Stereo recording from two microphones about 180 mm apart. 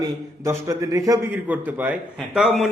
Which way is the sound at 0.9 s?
20° right (ahead or behind).